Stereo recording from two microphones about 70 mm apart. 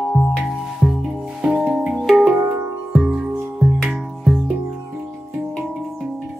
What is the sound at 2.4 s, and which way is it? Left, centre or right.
Music, right.